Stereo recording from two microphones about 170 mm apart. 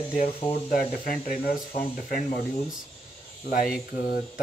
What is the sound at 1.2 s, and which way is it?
Speech, 55° left (ahead or behind).